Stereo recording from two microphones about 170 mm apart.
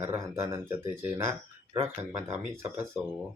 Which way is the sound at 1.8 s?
15° right (ahead or behind).